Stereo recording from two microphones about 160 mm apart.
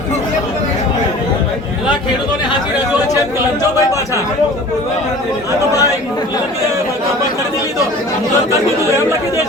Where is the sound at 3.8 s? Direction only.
20° left (ahead or behind).